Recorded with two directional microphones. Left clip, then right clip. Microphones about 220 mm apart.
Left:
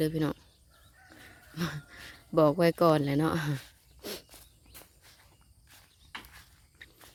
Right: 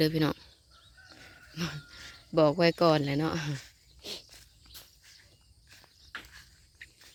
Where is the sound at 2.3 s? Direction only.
5° left (ahead or behind).